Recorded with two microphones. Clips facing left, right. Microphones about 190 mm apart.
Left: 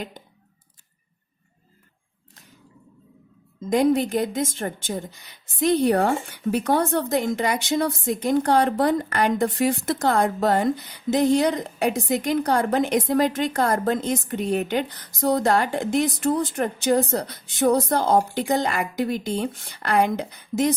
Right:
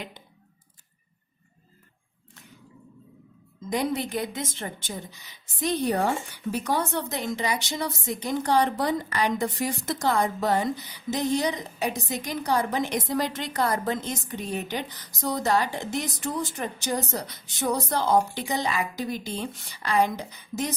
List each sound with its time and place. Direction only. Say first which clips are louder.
3.7 s a woman's voice: left 8 dB; 50° left (ahead or behind)